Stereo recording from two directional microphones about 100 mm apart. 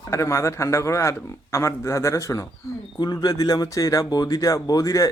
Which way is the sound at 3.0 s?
45° left (ahead or behind).